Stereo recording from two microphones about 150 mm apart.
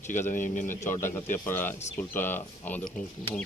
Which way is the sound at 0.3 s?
60° left (ahead or behind).